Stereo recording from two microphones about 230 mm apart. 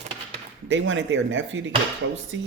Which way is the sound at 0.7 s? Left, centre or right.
Right.